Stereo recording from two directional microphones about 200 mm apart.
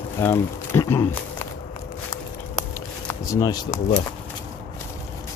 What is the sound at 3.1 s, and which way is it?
Speech, 15° left (ahead or behind).